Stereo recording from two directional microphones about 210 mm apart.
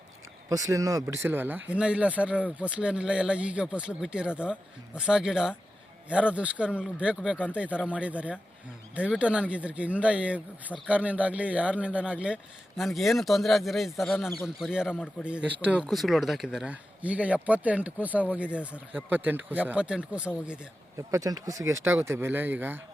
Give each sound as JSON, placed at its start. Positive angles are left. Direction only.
{"t": 0.5, "sound": "speech", "side_deg": -15}
{"t": 21.1, "sound": "speech", "side_deg": -15}